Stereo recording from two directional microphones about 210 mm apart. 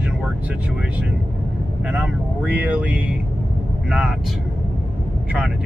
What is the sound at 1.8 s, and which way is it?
Speech, 5° right (ahead or behind).